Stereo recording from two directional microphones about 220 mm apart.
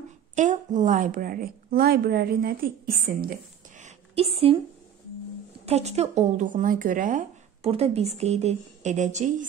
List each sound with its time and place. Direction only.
0.4 s speech: 35° right (ahead or behind)
3.8 s a sound: 25° right (ahead or behind)
5.7 s speech: 30° right (ahead or behind)